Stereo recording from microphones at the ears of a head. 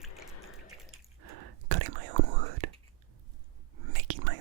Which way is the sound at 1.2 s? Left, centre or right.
Right.